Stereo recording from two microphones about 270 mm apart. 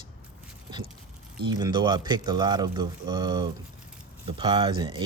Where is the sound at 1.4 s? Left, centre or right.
Centre.